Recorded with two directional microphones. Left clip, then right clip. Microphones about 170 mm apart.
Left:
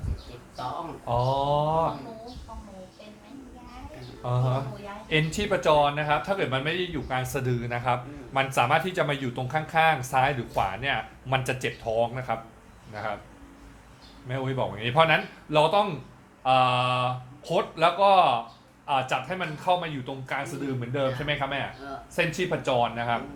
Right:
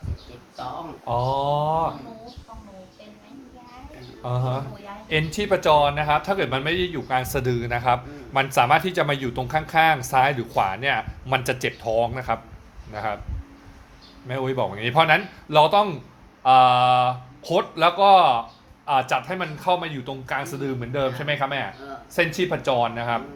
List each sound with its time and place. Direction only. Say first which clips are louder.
1.0 s mantra: right 3 dB; 65° right (ahead or behind)
4.2 s a sound: right 2 dB; 70° right (ahead or behind)
5.0 s a man's voice: right 3 dB; 65° right (ahead or behind)
14.3 s speech: right 5 dB; 70° right (ahead or behind)